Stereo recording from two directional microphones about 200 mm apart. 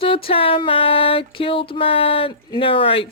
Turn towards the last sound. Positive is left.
turn(degrees=25)  # may be behind; listen again after turning